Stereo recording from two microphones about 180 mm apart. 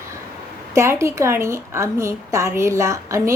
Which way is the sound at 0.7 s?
15° right (ahead or behind).